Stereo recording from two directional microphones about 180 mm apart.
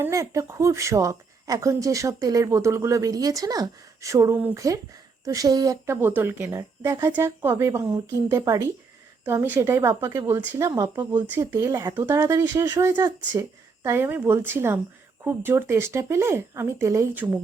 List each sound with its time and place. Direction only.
0.0 s a woman's voice: 15° right (ahead or behind)